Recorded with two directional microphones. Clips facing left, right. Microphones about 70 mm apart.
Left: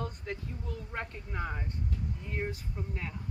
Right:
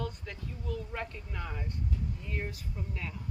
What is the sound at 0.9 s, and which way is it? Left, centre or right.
Speech, left.